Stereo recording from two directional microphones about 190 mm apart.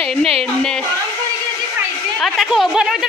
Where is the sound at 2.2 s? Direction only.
Centre (ahead or behind).